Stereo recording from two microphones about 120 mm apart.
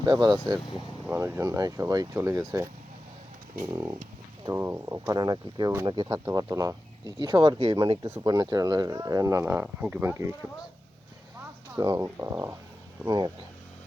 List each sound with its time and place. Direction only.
0.0 s speech: 35° right (ahead or behind)
1.0 s speech: 20° right (ahead or behind)
3.7 s speech: 25° right (ahead or behind)
11.8 s speech: 30° right (ahead or behind)